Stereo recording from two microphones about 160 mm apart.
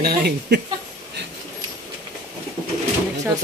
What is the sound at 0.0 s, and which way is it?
Speech, 75° right (ahead or behind).